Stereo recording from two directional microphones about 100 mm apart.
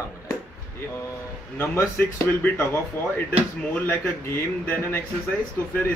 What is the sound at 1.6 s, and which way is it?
Speech, 25° left (ahead or behind).